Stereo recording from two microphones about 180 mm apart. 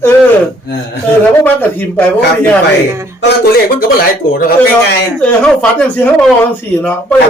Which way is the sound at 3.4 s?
55° left (ahead or behind).